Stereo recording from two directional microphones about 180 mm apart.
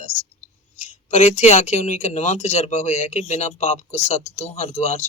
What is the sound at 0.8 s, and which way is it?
Speech, 40° left (ahead or behind).